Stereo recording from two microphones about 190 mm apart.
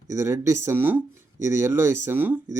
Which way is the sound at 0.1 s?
15° right (ahead or behind).